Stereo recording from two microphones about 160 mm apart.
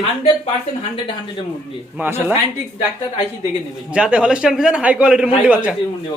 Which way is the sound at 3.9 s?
5° right (ahead or behind).